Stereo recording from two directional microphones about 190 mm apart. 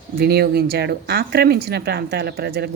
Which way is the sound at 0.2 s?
55° right (ahead or behind).